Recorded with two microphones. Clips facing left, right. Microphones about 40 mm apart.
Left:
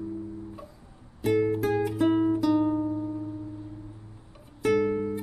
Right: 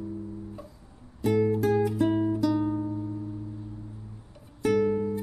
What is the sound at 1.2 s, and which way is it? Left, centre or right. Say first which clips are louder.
Music: even; centre.